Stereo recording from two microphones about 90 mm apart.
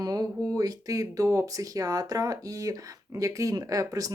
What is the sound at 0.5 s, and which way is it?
Speech, 45° right (ahead or behind).